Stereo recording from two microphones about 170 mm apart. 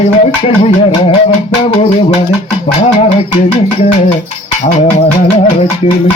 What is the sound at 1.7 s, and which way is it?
A man's voice, 35° left (ahead or behind).